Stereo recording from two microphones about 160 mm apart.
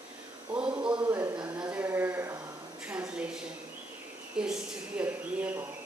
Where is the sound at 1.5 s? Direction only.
10° right (ahead or behind).